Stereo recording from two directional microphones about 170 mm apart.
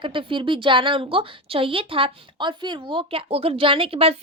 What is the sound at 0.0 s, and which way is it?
A woman's voice, 30° right (ahead or behind).